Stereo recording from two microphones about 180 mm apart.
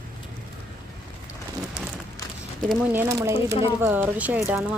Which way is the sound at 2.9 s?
10° right (ahead or behind).